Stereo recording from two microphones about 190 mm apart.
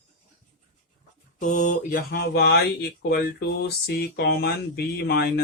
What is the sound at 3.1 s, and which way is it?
Speech, 55° left (ahead or behind).